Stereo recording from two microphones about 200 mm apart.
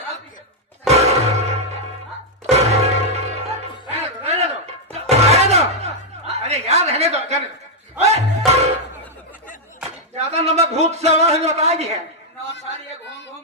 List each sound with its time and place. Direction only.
0.9 s music: 30° right (ahead or behind)
6.3 s chuckle: 35° right (ahead or behind)
7.9 s music: 30° right (ahead or behind)
10.2 s a sound: 35° right (ahead or behind)